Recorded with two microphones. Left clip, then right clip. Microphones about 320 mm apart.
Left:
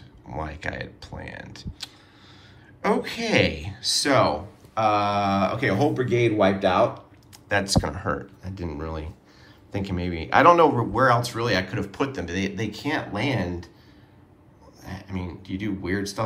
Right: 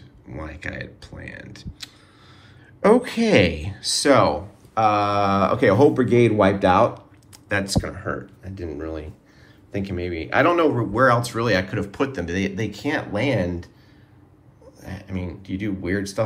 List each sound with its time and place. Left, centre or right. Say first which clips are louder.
0.3 s speech: left 2 dB; centre
7.4 s speech: left 1 dB; centre
14.8 s speech: right 2 dB; centre